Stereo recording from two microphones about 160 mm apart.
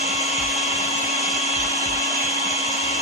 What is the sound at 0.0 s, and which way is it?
Blender, centre (ahead or behind).